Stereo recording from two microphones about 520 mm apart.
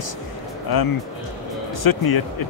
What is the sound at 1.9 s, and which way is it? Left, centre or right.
Speech, left.